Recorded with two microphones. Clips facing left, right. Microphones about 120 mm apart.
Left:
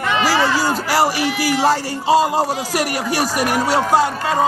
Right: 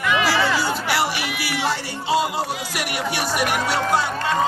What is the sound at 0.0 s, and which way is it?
Speech, 35° left (ahead or behind).